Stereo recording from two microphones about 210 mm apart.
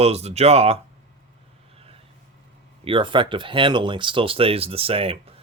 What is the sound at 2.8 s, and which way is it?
Speech, 25° right (ahead or behind).